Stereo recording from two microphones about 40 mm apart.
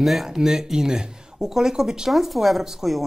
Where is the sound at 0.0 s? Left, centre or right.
Centre.